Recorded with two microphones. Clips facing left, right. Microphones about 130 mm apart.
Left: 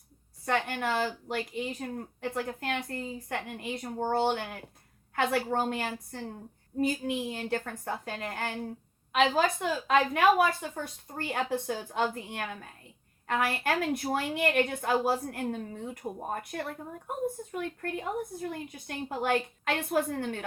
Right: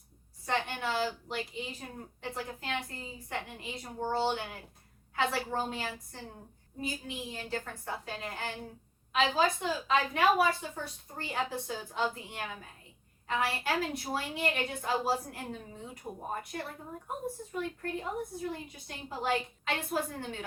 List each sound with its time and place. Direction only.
0.4 s a woman's voice: 50° left (ahead or behind)